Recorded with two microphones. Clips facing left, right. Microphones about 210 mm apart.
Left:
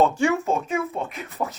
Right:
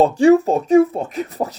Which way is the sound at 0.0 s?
35° right (ahead or behind).